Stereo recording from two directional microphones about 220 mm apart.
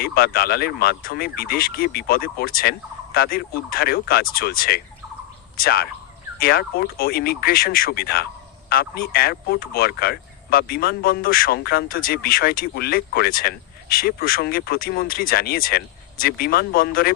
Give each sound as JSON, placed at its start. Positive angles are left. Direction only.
{"t": 0.0, "sound": "speech", "side_deg": 45}